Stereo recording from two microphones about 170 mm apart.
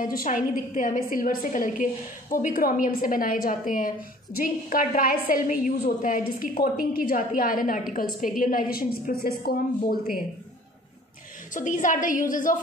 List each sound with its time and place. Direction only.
0.0 s a woman's voice: 55° left (ahead or behind)
11.5 s a woman's voice: 50° left (ahead or behind)